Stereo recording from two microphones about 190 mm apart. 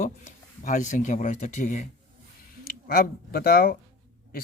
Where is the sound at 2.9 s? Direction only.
50° left (ahead or behind).